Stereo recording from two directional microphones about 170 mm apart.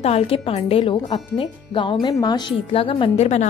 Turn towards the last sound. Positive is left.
turn(degrees=40)  # may be behind; listen again after turning